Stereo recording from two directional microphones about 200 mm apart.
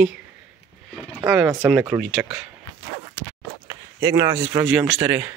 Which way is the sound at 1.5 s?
5° right (ahead or behind).